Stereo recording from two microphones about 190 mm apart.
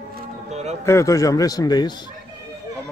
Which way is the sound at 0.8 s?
15° left (ahead or behind).